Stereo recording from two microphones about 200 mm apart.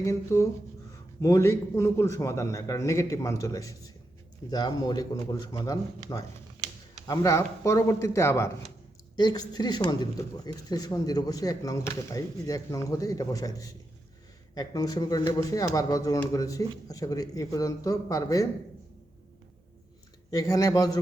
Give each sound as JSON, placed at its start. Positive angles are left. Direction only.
{"t": 0.0, "sound": "speech", "side_deg": 15}
{"t": 20.3, "sound": "speech", "side_deg": 15}